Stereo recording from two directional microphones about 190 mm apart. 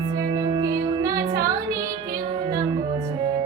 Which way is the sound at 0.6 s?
20° right (ahead or behind).